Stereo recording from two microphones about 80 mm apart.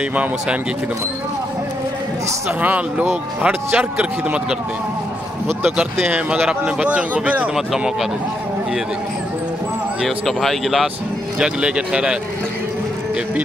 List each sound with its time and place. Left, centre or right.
0.1 s speech: centre
2.6 s speech: right
6.4 s speech: centre
7.5 s speech: centre
10.0 s speech: centre